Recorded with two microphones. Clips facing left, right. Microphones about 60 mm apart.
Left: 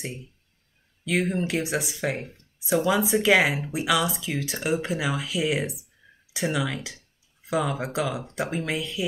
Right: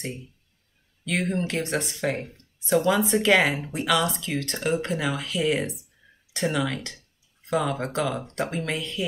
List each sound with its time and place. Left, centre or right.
1.0 s speech: centre